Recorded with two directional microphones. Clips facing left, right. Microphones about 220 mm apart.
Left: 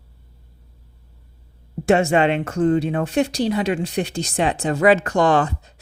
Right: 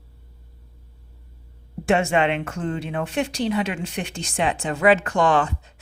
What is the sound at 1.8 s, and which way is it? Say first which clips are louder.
Speech: left 4 dB; 40° left (ahead or behind).